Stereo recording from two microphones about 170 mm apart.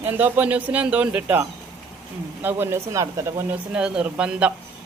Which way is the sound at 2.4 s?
15° right (ahead or behind).